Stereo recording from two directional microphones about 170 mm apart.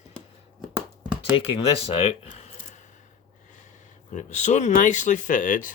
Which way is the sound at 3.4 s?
45° left (ahead or behind).